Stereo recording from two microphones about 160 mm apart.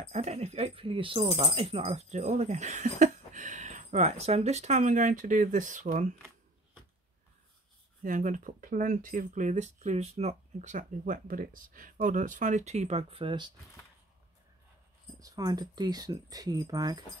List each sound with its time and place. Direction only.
0.0 s speech: 45° right (ahead or behind)
8.0 s speech: 55° right (ahead or behind); by 13.5 s 30° right (ahead or behind)
15.1 s speech: 25° right (ahead or behind)